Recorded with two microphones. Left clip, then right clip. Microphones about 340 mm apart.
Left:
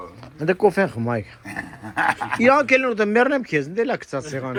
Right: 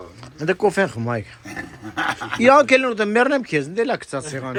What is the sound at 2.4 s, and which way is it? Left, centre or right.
A man's voice, centre.